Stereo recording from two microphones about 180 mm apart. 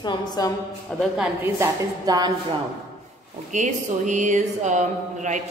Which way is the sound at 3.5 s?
40° right (ahead or behind).